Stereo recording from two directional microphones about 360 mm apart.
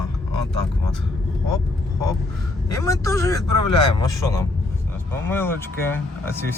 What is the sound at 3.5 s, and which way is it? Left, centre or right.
Speech, left.